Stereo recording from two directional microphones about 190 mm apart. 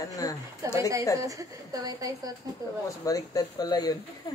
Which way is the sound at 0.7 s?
15° right (ahead or behind).